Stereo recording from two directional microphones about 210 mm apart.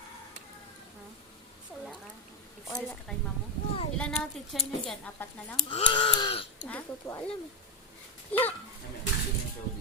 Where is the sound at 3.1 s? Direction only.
Centre (ahead or behind).